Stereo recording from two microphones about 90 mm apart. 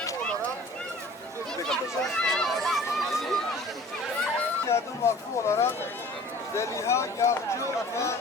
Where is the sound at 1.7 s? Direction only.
5° left (ahead or behind).